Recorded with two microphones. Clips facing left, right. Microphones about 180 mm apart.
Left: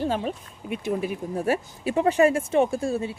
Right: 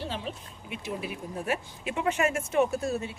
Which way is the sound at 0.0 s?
45° left (ahead or behind).